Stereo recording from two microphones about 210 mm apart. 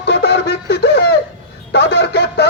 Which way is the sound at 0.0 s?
55° left (ahead or behind).